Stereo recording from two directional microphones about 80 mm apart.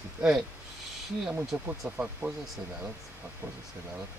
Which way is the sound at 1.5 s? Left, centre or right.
Centre.